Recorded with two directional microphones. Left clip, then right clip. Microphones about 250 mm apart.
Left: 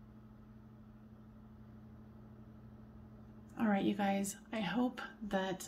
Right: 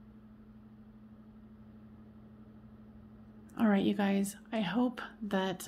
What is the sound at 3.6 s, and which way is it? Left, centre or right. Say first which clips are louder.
A woman's voice: right 4 dB; right.